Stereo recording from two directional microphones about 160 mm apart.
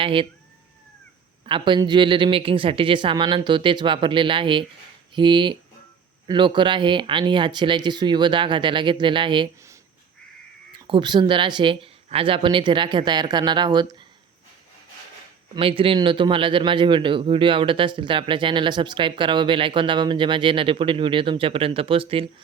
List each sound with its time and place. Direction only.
0.0 s a man's voice: 35° right (ahead or behind)
1.5 s a man's voice: 30° right (ahead or behind)
10.7 s a man's voice: 30° right (ahead or behind)
15.5 s a man's voice: 35° right (ahead or behind)